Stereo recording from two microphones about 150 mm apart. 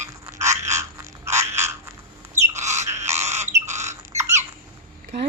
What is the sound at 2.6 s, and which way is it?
Squawk, 50° right (ahead or behind).